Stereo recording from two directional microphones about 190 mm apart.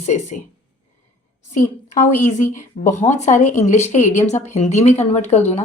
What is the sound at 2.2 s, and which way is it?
Speech, 40° left (ahead or behind).